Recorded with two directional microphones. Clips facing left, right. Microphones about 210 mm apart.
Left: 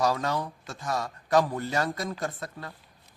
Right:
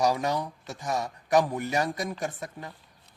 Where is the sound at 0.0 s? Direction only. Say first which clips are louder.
Right 1 dB; 15° right (ahead or behind).